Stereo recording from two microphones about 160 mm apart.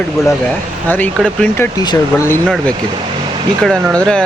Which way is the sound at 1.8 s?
20° left (ahead or behind).